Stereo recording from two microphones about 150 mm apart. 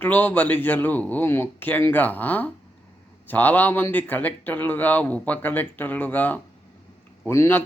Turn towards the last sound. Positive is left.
turn(degrees=15)  # may be behind; listen again after turning